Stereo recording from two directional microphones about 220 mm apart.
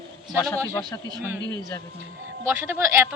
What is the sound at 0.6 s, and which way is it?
A man's voice, 15° right (ahead or behind).